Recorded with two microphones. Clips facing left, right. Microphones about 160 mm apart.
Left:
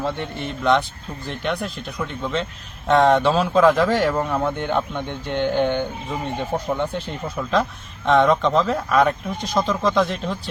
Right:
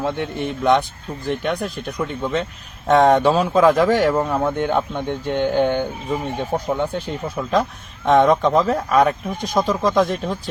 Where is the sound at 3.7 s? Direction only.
45° right (ahead or behind).